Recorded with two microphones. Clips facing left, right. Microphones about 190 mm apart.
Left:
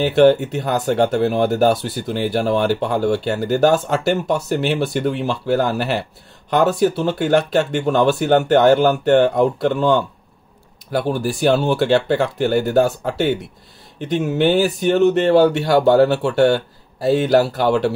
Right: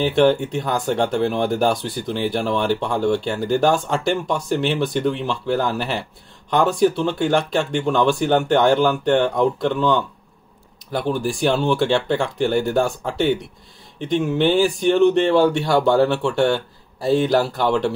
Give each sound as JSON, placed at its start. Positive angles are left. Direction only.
{"t": 0.0, "sound": "speech", "side_deg": 5}
{"t": 11.2, "sound": "speech", "side_deg": 5}
{"t": 13.9, "sound": "speech", "side_deg": 5}
{"t": 15.0, "sound": "speech", "side_deg": 40}
{"t": 15.3, "sound": "speech", "side_deg": 5}